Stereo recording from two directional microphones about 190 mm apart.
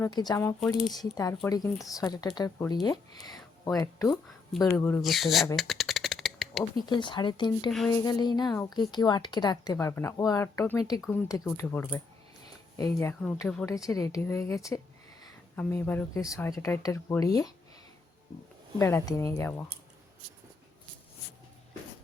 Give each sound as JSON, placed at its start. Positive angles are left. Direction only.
{"t": 0.0, "sound": "speech", "side_deg": 20}
{"t": 5.0, "sound": "speech", "side_deg": 0}
{"t": 5.5, "sound": "shuffling cards", "side_deg": 0}
{"t": 6.7, "sound": "speech", "side_deg": 25}
{"t": 18.8, "sound": "speech", "side_deg": 15}